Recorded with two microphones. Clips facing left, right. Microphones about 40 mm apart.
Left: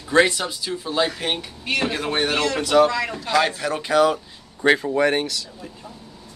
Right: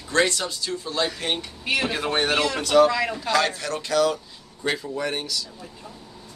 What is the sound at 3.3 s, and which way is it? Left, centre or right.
Speech, centre.